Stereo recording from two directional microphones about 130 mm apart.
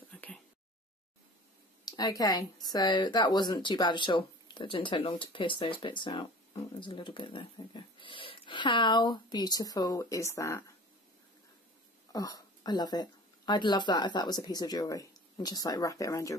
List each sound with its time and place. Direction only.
0.1 s whispering: 10° left (ahead or behind)
1.9 s speech: 30° left (ahead or behind)
12.1 s speech: 30° left (ahead or behind)